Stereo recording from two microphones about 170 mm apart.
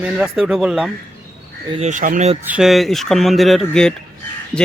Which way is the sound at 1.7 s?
45° right (ahead or behind).